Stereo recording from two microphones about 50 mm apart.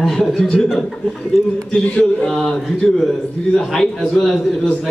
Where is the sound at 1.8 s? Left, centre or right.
Centre.